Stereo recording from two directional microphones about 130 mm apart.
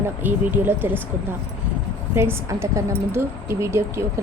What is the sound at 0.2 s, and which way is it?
Speech, 15° right (ahead or behind).